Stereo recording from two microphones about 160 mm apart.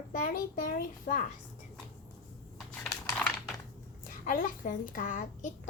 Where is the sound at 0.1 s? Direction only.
55° left (ahead or behind).